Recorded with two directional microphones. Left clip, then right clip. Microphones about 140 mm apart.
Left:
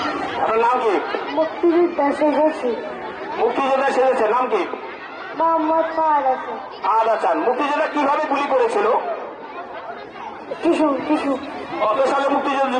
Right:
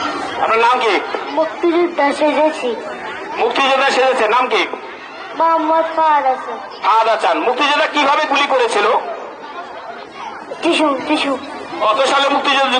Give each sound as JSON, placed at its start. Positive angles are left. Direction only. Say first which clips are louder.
{"t": 0.0, "sound": "speech", "louder": "right 3 dB", "side_deg": 15}
{"t": 3.3, "sound": "a man's voice", "louder": "right 4 dB", "side_deg": 15}
{"t": 10.7, "sound": "a man's voice", "louder": "right 3 dB", "side_deg": 20}